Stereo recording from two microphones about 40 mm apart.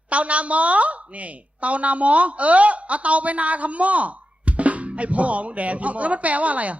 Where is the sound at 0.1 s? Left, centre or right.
Right.